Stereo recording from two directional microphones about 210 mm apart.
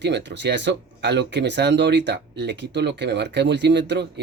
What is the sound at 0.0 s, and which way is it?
Speech, 55° right (ahead or behind).